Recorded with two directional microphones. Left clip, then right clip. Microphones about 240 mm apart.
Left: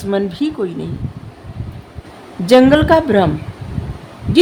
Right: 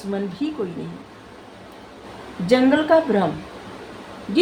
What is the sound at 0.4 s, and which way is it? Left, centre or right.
Speech, left.